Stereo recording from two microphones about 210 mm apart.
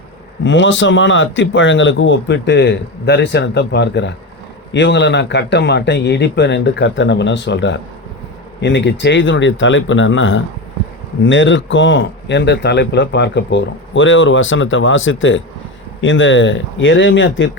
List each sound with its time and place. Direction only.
0.4 s speech: 60° left (ahead or behind)